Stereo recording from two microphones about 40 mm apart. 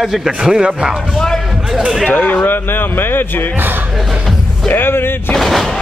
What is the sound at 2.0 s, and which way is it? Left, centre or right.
A man's voice, left.